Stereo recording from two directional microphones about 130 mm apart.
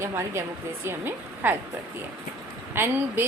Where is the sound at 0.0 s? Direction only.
20° right (ahead or behind).